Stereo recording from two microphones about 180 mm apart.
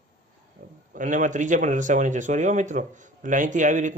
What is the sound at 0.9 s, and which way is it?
Speech, 45° right (ahead or behind).